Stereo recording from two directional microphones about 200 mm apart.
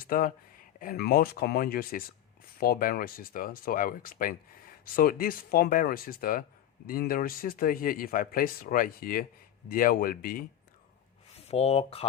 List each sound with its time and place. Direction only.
0.1 s speech: 45° left (ahead or behind)
11.3 s speech: 30° left (ahead or behind)